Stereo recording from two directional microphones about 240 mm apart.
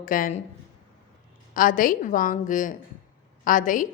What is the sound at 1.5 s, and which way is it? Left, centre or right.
A woman's voice, left.